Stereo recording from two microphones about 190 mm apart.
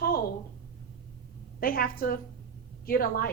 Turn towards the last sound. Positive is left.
turn(degrees=50)  # may be behind; listen again after turning